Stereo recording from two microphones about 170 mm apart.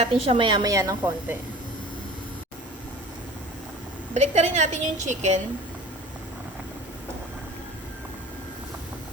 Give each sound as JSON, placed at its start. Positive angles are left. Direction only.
{"t": 0.0, "sound": "a woman's voice", "side_deg": -30}
{"t": 4.1, "sound": "a woman's voice", "side_deg": -40}